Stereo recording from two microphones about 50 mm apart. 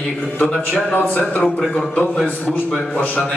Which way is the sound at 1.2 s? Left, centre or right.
Centre.